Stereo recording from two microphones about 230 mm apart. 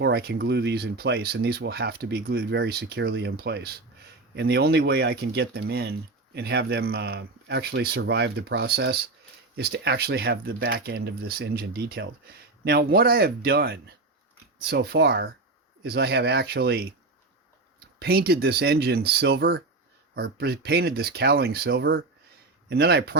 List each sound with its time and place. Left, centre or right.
0.0 s speech: right
18.0 s speech: right